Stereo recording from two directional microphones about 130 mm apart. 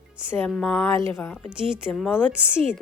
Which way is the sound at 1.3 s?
5° right (ahead or behind).